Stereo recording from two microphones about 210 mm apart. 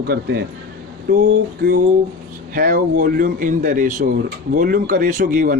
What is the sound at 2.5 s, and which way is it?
A man's voice, 40° right (ahead or behind).